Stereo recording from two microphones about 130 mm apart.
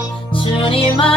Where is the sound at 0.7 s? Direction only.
45° left (ahead or behind).